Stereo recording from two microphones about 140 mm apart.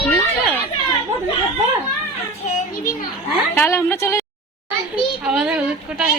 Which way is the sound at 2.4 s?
60° left (ahead or behind).